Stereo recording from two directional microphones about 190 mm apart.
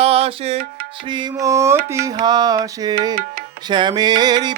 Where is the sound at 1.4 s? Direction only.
15° right (ahead or behind).